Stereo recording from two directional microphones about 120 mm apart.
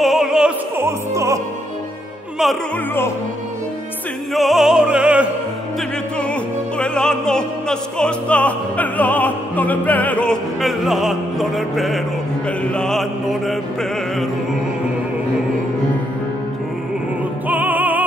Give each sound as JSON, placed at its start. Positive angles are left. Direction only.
{"t": 0.0, "sound": "opera", "side_deg": -5}
{"t": 0.7, "sound": "opera", "side_deg": -25}
{"t": 2.4, "sound": "music", "side_deg": 0}
{"t": 4.3, "sound": "music", "side_deg": 0}
{"t": 6.8, "sound": "opera", "side_deg": 5}
{"t": 12.7, "sound": "music", "side_deg": 5}
{"t": 17.5, "sound": "music", "side_deg": -15}